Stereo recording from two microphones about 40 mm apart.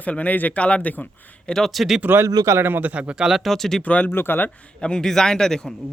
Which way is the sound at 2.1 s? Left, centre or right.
Right.